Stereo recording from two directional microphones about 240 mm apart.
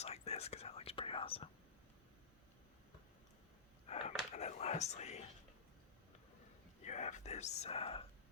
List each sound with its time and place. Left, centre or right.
0.0 s whispering: left
3.8 s whispering: left
6.8 s whispering: left